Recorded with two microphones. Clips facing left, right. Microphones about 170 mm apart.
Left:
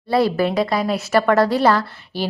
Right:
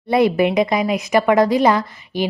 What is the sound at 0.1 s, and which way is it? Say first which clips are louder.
A woman's voice: right 2 dB; 20° right (ahead or behind).